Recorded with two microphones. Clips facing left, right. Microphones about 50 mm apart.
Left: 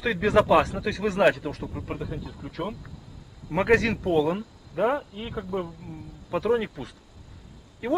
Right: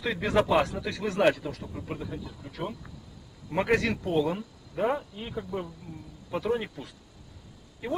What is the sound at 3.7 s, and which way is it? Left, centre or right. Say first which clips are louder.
Speech: left 5 dB; centre.